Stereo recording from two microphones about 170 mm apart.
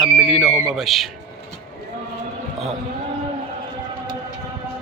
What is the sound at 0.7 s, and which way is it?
Speech, centre (ahead or behind).